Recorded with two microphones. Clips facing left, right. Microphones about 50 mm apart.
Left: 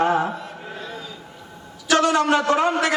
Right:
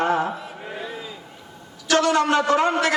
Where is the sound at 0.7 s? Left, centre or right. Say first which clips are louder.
Right 3 dB; centre.